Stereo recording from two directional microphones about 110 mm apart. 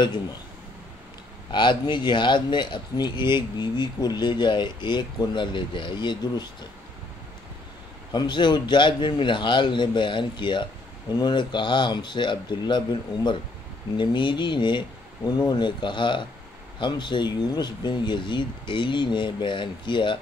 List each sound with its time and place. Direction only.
1.5 s speech: 45° left (ahead or behind)
8.1 s speech: 40° left (ahead or behind)